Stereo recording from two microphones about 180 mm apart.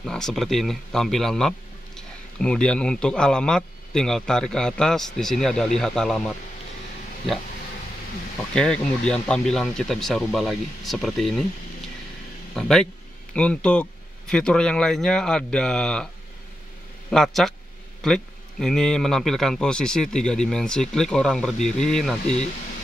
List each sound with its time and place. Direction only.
0.0 s a man's voice: centre (ahead or behind)
8.5 s speech: 5° left (ahead or behind)
12.5 s speech: 5° left (ahead or behind)
17.1 s speech: centre (ahead or behind)